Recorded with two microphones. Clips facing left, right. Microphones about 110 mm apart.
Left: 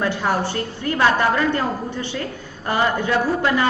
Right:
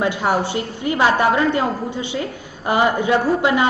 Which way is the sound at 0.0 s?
15° right (ahead or behind).